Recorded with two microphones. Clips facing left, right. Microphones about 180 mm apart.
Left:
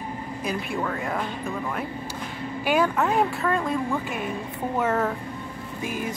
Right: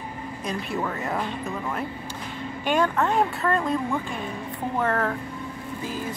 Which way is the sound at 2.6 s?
10° left (ahead or behind).